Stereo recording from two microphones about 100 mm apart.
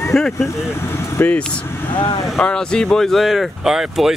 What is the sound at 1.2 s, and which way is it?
Speech, 15° left (ahead or behind).